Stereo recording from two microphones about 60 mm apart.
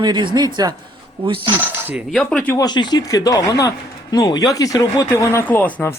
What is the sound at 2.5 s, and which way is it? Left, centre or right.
Speech, left.